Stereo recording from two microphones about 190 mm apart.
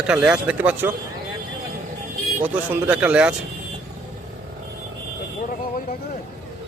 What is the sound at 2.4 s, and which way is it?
Speech, 10° right (ahead or behind).